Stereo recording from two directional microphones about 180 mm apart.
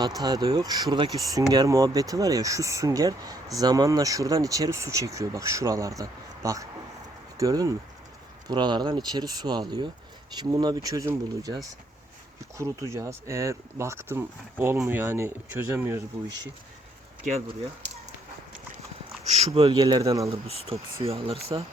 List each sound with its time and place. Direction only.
0.0 s speech: 20° right (ahead or behind)
19.2 s speech: 35° right (ahead or behind); by 20.3 s 20° right (ahead or behind)
20.7 s speech: 35° right (ahead or behind)